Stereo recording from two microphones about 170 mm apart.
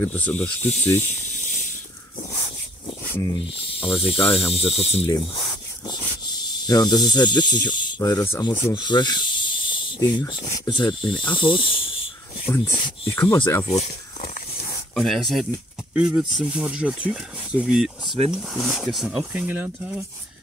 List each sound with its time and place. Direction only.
0.0 s snake: 10° left (ahead or behind)
1.0 s snake: 45° left (ahead or behind)
3.0 s a sound: 15° left (ahead or behind)
3.3 s speech: 35° left (ahead or behind)
13.1 s snake: 15° left (ahead or behind)
13.7 s a sound: 40° left (ahead or behind)
15.0 s speech: centre (ahead or behind)